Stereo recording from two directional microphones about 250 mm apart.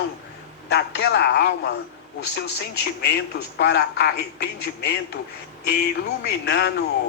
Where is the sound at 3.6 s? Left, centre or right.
Left.